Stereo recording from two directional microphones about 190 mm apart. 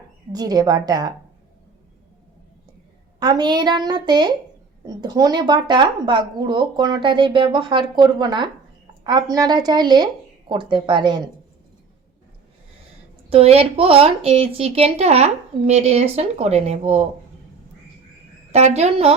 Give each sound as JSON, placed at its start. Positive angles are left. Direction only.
{"t": 0.3, "sound": "speech", "side_deg": -20}
{"t": 3.2, "sound": "speech", "side_deg": -20}
{"t": 13.3, "sound": "a woman's voice", "side_deg": -30}
{"t": 18.5, "sound": "a woman's voice", "side_deg": -35}